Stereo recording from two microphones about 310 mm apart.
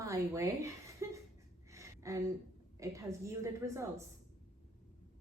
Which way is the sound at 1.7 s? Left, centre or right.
Centre.